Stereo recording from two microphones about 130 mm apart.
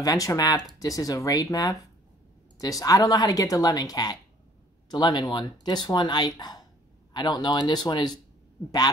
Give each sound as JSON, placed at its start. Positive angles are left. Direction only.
{"t": 0.0, "sound": "speech", "side_deg": 25}